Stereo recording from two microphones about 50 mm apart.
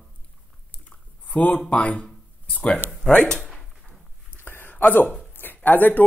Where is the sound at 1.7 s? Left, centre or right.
Left.